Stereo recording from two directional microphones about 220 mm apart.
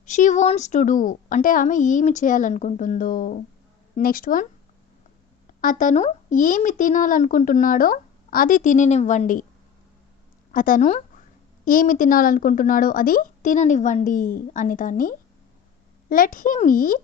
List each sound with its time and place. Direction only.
0.0 s a child's voice: 35° left (ahead or behind)
5.5 s a child's voice: 35° left (ahead or behind)
10.5 s a child's voice: 40° left (ahead or behind)